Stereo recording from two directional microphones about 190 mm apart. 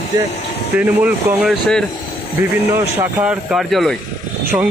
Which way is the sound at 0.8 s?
10° right (ahead or behind).